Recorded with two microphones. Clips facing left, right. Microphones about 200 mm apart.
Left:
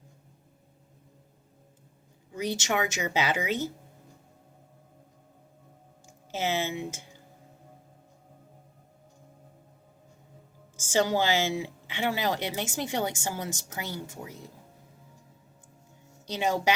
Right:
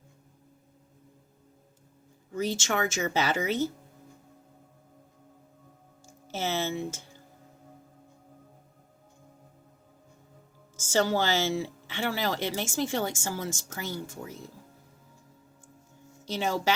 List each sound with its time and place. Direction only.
2.3 s speech: 15° left (ahead or behind)
6.3 s speech: 15° left (ahead or behind)
10.8 s speech: 15° left (ahead or behind)
16.2 s speech: 15° left (ahead or behind)